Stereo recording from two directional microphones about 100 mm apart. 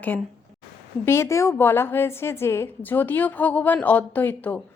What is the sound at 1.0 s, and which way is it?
A woman's voice, 25° left (ahead or behind).